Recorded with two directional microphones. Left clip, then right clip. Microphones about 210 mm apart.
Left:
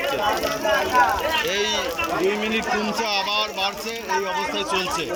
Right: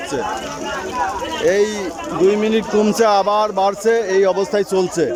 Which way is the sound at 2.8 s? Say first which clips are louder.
Right 9 dB; 45° right (ahead or behind).